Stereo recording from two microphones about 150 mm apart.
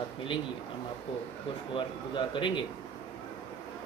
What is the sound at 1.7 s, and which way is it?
Speech, 35° left (ahead or behind).